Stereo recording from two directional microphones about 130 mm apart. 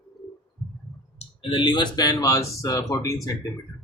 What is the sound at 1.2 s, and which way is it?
Speech, 40° left (ahead or behind).